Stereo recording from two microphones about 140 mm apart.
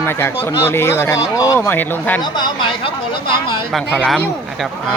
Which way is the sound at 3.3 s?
35° left (ahead or behind).